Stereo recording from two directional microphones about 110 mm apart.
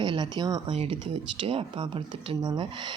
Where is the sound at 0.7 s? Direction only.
65° right (ahead or behind); by 2.9 s 45° right (ahead or behind).